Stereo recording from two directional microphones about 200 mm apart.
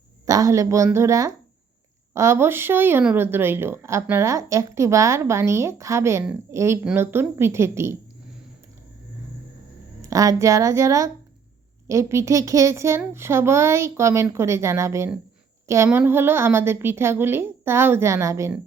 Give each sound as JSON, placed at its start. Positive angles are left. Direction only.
{"t": 0.3, "sound": "speech", "side_deg": -15}
{"t": 10.0, "sound": "speech", "side_deg": -15}